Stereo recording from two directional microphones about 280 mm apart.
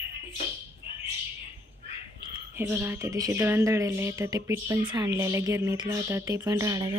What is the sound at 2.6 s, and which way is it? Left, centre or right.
Speech, centre.